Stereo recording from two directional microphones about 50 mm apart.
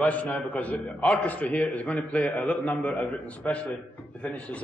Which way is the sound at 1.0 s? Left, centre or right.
Centre.